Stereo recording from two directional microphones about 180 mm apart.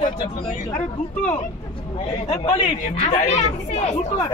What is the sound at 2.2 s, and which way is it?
Speech, 35° left (ahead or behind).